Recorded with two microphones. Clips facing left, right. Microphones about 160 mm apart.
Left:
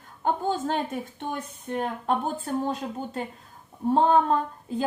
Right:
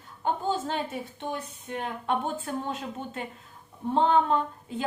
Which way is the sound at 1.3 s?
45° left (ahead or behind).